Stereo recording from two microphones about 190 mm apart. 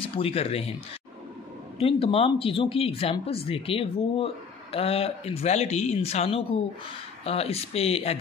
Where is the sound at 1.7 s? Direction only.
30° left (ahead or behind).